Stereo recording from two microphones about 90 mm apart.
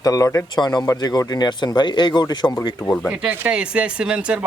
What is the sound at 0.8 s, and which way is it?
Speech, 40° left (ahead or behind).